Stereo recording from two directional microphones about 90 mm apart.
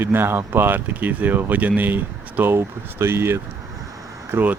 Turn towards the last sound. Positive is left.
turn(degrees=-20)  # may be behind; listen again after turning